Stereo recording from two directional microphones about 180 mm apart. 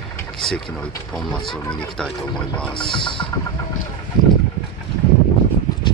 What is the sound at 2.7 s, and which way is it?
Music, 25° left (ahead or behind).